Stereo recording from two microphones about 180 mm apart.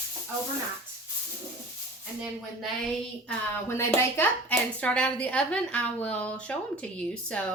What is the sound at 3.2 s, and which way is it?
Speech, 15° left (ahead or behind).